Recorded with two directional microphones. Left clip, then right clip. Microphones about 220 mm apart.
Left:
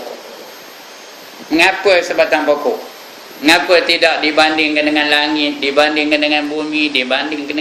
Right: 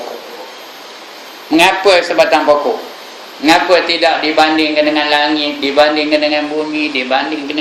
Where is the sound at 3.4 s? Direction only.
20° left (ahead or behind).